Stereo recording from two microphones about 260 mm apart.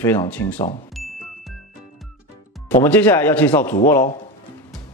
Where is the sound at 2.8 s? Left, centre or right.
Centre.